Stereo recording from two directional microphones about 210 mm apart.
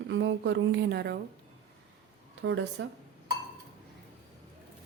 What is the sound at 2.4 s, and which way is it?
Speech, 60° right (ahead or behind).